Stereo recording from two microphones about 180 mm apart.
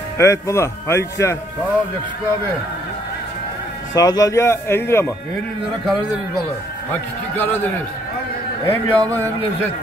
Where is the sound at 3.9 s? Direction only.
20° left (ahead or behind).